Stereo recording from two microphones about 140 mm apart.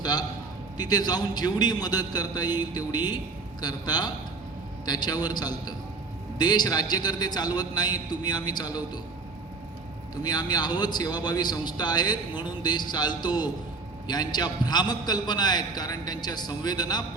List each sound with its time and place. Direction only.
0.0 s a man's voice: 30° left (ahead or behind)
10.2 s a man's voice: 30° left (ahead or behind)